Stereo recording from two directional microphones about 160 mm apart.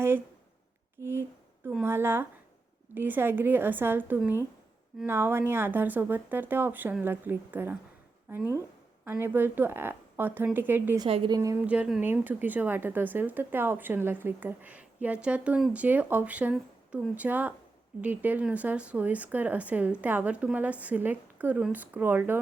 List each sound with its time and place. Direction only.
1.6 s a woman's voice: 15° right (ahead or behind)
9.0 s a woman's voice: 15° right (ahead or behind)
11.0 s a woman's voice: 30° right (ahead or behind)
11.3 s a woman's voice: 20° right (ahead or behind)
11.6 s a woman's voice: 10° right (ahead or behind)